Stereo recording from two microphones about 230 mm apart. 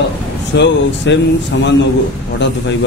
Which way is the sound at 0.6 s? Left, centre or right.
Left.